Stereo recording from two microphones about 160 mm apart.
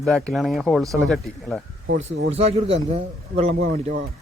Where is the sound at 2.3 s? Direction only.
40° right (ahead or behind).